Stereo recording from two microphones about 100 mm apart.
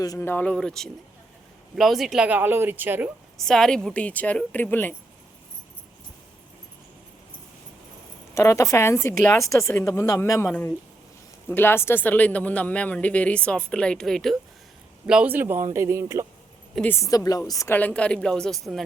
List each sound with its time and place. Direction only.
0.2 s speech: 20° left (ahead or behind); by 2.2 s centre (ahead or behind)
2.2 s speech: 20° right (ahead or behind)
3.3 s speech: 5° left (ahead or behind)
8.4 s speech: 30° left (ahead or behind)
10.4 s speech: 15° left (ahead or behind)
15.0 s a man's voice: 10° right (ahead or behind)
15.3 s speech: 20° right (ahead or behind)
17.0 s speech: 35° left (ahead or behind)
17.7 s speech: 15° left (ahead or behind); by 18.8 s centre (ahead or behind)